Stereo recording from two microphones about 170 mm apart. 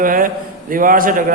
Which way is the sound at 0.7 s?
55° right (ahead or behind).